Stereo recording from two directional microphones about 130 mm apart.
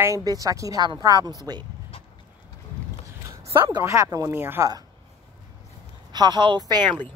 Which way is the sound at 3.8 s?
25° right (ahead or behind).